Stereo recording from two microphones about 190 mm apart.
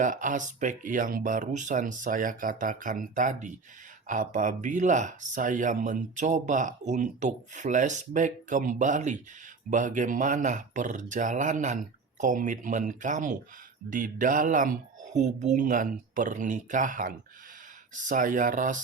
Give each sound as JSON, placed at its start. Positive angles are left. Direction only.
{"t": 0.0, "sound": "speech", "side_deg": -45}